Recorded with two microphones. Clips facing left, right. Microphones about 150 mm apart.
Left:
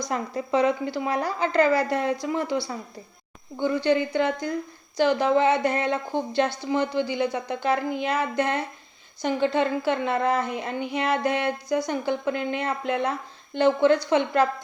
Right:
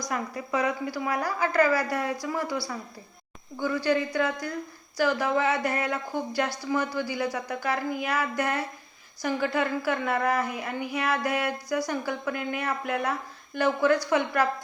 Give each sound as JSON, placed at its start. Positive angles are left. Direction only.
{"t": 0.0, "sound": "speech", "side_deg": 25}